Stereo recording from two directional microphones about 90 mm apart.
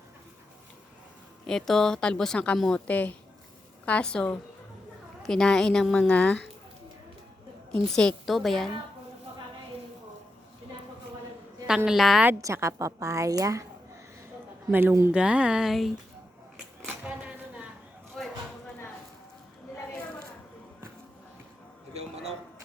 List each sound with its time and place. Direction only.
1.5 s a woman's voice: 5° left (ahead or behind)
2.8 s a woman's voice: 15° left (ahead or behind)
7.7 s a woman's voice: 5° left (ahead or behind)
11.9 s a woman's voice: 5° right (ahead or behind)
12.4 s a woman's voice: 35° right (ahead or behind)
14.7 s speech: 20° right (ahead or behind); by 15.9 s 5° right (ahead or behind)
17.1 s a sound: 15° right (ahead or behind)
18.2 s a sound: 5° left (ahead or behind)